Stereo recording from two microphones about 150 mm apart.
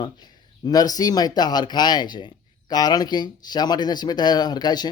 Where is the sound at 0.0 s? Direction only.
25° left (ahead or behind).